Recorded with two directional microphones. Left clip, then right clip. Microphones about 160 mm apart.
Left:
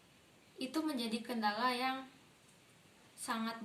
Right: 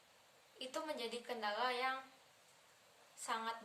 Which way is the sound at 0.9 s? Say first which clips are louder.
Left 4 dB; 15° right (ahead or behind).